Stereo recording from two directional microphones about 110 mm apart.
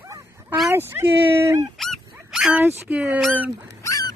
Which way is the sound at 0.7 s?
20° right (ahead or behind).